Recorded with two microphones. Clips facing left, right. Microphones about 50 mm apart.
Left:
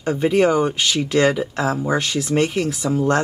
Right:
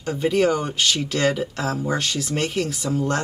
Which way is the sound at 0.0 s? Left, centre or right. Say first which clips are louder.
Left 3 dB; centre.